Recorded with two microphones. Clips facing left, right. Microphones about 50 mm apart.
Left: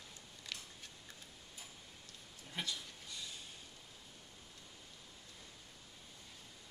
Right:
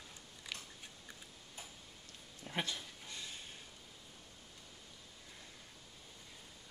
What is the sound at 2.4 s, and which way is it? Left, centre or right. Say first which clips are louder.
Dog: right 3 dB; right.